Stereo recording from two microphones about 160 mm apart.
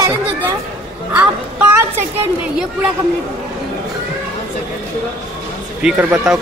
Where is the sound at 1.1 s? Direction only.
10° right (ahead or behind).